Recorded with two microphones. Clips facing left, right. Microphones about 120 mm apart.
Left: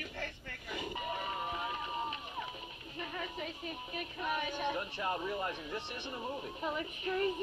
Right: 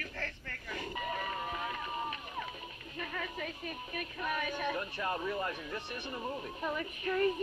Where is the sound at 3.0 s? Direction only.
20° left (ahead or behind).